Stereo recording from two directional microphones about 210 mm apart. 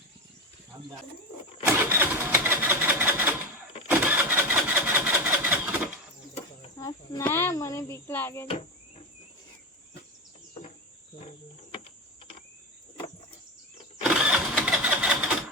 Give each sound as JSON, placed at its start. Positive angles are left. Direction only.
{"t": 0.7, "sound": "speech", "side_deg": -20}
{"t": 1.6, "sound": "vehicle", "side_deg": -10}
{"t": 6.7, "sound": "speech", "side_deg": 15}
{"t": 14.0, "sound": "engine starting", "side_deg": -5}